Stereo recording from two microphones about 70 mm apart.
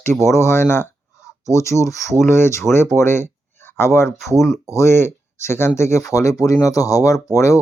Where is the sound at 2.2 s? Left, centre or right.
Left.